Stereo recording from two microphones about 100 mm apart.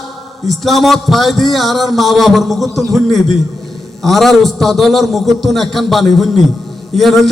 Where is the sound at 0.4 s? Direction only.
Centre (ahead or behind).